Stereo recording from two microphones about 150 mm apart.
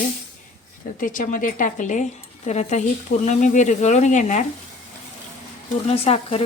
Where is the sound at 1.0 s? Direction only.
60° left (ahead or behind).